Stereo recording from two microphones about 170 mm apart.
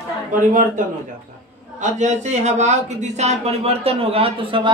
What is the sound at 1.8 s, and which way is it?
Speech, 45° right (ahead or behind).